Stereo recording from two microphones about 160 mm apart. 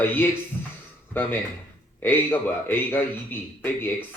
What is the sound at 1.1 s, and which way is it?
Speech, 10° left (ahead or behind).